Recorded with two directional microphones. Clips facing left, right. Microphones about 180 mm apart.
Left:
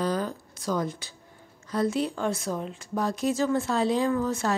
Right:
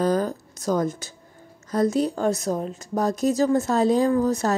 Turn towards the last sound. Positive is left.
turn(degrees=-40)  # may be behind; listen again after turning